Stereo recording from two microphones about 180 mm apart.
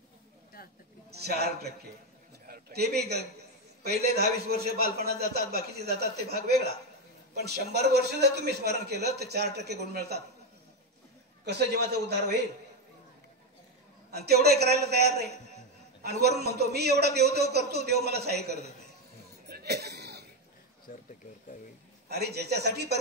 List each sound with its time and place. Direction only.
0.6 s bleat: 55° left (ahead or behind)
1.2 s a man's voice: 65° right (ahead or behind)
2.4 s a sound: 60° right (ahead or behind)
3.8 s a man's voice: 60° right (ahead or behind)
11.4 s speech: 65° right (ahead or behind)
14.1 s a man's voice: 60° right (ahead or behind)
19.4 s a sound: 65° right (ahead or behind)
20.9 s a sound: 50° left (ahead or behind)
22.1 s speech: 65° right (ahead or behind)